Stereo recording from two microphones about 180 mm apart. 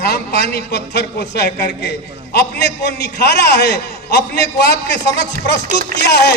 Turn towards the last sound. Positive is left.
turn(degrees=65)  # may be behind; listen again after turning